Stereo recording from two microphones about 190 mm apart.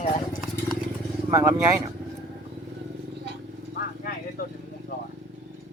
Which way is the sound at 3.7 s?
55° left (ahead or behind).